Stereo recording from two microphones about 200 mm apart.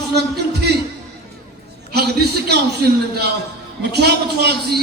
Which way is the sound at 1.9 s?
55° right (ahead or behind).